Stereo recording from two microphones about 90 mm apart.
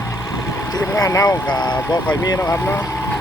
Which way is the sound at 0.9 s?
40° left (ahead or behind).